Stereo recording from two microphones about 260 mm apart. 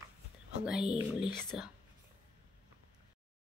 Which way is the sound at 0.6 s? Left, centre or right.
Centre.